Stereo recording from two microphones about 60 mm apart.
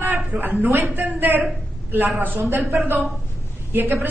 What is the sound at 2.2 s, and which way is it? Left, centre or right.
Speech, right.